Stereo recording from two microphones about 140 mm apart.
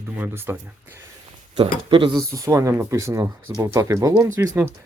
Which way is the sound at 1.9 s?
35° right (ahead or behind).